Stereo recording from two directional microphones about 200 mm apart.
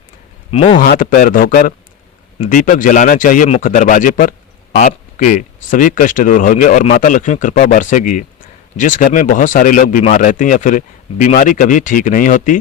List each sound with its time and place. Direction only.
0.5 s a man's voice: 30° left (ahead or behind)
0.8 s a man's voice: 45° left (ahead or behind)